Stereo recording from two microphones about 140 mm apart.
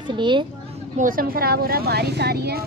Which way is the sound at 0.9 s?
85° right.